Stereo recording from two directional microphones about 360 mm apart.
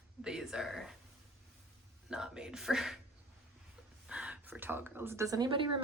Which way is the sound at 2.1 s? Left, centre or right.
Centre.